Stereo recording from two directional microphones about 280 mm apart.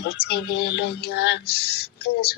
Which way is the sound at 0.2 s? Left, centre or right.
Left.